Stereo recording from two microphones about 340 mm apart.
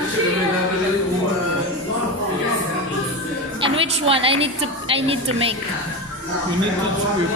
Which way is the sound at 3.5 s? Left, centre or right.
Centre.